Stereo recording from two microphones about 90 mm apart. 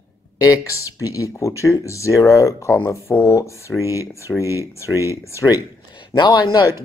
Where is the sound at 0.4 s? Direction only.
40° left (ahead or behind).